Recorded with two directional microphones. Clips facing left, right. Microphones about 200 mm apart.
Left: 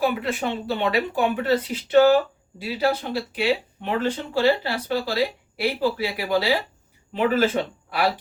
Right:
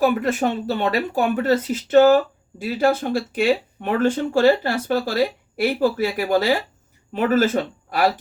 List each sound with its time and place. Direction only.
0.0 s speech: 45° right (ahead or behind)